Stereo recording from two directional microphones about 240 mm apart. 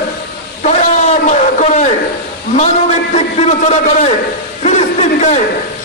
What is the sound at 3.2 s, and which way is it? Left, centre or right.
Speech, left.